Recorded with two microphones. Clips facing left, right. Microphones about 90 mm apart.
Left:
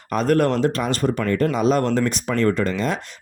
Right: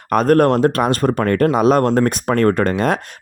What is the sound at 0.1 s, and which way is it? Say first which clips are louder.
Speech: right 5 dB; 50° right (ahead or behind).